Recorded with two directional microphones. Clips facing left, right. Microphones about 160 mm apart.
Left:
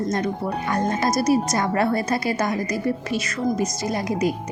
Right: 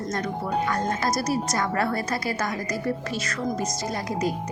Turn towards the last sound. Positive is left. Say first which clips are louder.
# left 4 dB
turn(degrees=15)  # may be behind; listen again after turning